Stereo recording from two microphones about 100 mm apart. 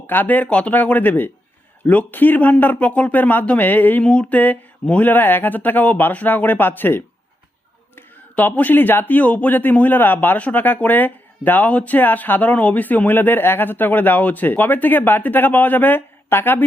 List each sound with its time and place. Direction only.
0.1 s speech: 20° left (ahead or behind)